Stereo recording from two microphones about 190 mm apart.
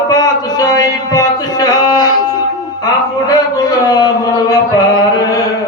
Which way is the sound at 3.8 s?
20° left (ahead or behind).